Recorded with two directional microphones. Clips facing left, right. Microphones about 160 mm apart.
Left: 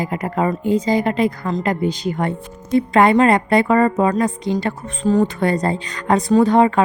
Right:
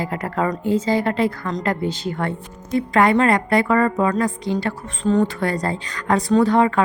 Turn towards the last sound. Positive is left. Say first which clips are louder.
# left 2 dB
turn(degrees=20)  # may be behind; listen again after turning